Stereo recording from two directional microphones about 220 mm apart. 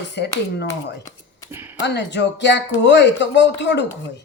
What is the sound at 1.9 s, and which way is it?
Speech, 50° left (ahead or behind).